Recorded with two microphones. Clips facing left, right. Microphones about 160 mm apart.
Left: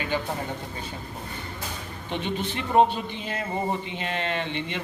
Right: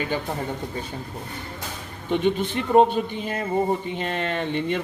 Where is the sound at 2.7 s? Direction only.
45° right (ahead or behind).